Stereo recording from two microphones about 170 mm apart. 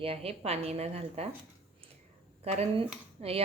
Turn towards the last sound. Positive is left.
turn(degrees=-35)  # may be behind; listen again after turning